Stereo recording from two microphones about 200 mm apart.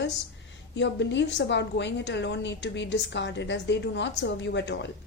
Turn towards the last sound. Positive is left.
turn(degrees=60)  # may be behind; listen again after turning